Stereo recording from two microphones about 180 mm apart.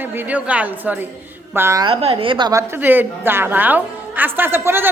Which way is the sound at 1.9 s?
30° right (ahead or behind).